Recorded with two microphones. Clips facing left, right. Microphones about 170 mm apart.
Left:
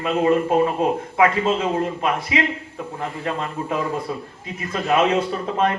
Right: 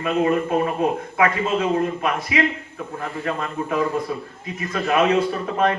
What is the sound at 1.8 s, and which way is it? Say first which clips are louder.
A man's voice: even; 30° left (ahead or behind).